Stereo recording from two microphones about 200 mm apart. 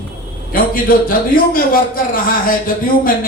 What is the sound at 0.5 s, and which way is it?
A man's voice, 45° left (ahead or behind).